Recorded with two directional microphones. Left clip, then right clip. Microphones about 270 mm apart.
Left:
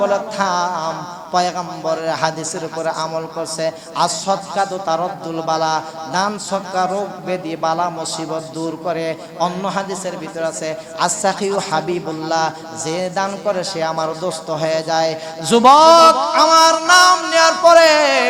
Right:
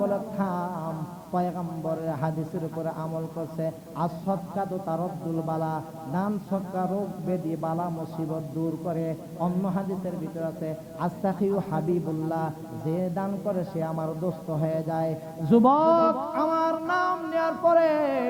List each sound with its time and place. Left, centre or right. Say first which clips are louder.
0.0 s mantra: left 11 dB; centre
1.4 s a man's voice: left 11 dB; centre
14.6 s a man's voice: left 11 dB; centre